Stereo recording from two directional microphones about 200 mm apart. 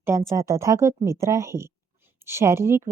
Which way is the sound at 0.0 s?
10° right (ahead or behind).